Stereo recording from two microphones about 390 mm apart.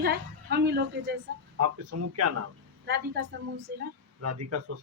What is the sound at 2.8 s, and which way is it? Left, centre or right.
A woman's voice, right.